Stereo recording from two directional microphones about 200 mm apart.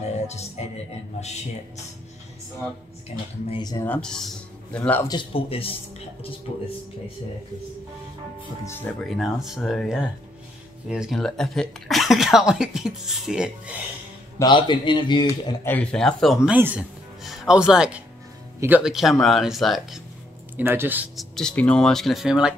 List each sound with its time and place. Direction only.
3.4 s speech: 20° left (ahead or behind)
3.9 s speech: 5° left (ahead or behind)
5.0 s speech: 25° left (ahead or behind)
9.0 s speech: centre (ahead or behind)
14.4 s speech: 25° left (ahead or behind)
15.6 s speech: 5° left (ahead or behind); by 21.3 s 10° right (ahead or behind)
21.4 s speech: 5° left (ahead or behind)